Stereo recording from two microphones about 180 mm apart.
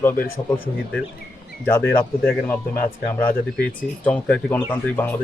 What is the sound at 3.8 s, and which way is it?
A man's voice, 10° left (ahead or behind).